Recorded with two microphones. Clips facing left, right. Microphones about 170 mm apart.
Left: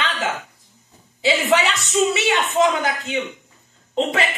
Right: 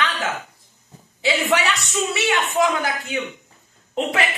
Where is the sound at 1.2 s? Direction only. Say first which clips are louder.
Left 2 dB; 20° left (ahead or behind).